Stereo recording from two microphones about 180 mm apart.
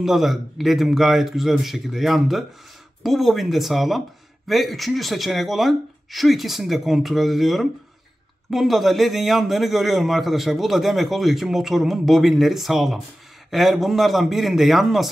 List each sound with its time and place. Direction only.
0.0 s a man's voice: centre (ahead or behind)